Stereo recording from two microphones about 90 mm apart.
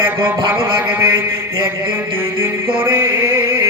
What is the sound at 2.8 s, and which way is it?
Music, 25° right (ahead or behind).